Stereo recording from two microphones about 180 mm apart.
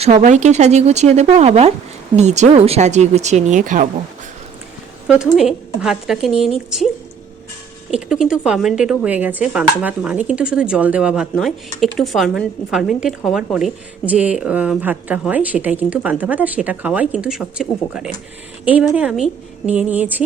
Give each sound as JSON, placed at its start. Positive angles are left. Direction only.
{"t": 0.0, "sound": "speech", "side_deg": -40}
{"t": 5.0, "sound": "speech", "side_deg": -5}
{"t": 7.9, "sound": "speech", "side_deg": -5}